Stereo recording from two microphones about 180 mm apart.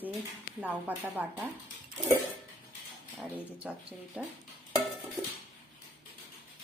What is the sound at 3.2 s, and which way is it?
Speech, 5° right (ahead or behind).